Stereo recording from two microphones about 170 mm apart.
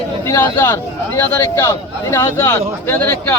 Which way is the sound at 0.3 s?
15° left (ahead or behind).